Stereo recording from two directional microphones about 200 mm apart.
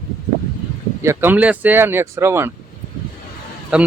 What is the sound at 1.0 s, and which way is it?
Speech, 10° right (ahead or behind).